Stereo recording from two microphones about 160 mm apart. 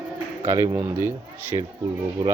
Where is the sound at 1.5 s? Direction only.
25° right (ahead or behind).